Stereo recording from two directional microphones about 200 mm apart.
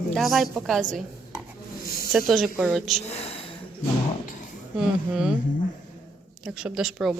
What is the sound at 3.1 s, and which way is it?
Speech, 30° left (ahead or behind).